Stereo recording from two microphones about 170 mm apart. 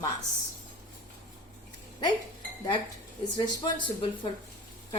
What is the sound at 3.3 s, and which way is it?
Speech, 25° left (ahead or behind).